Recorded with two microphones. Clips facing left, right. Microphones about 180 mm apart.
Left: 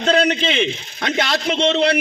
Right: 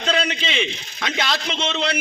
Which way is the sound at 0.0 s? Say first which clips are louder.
Left 6 dB; 45° left (ahead or behind).